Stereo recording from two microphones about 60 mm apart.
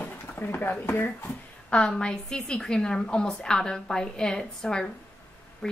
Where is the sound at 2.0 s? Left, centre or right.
Centre.